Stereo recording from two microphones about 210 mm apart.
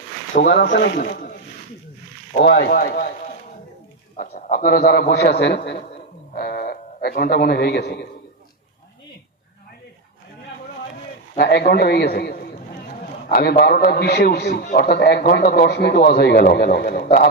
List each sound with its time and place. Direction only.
0.3 s a man's voice: 45° left (ahead or behind)
4.2 s a man's voice: 35° left (ahead or behind)
11.3 s a man's voice: 50° left (ahead or behind)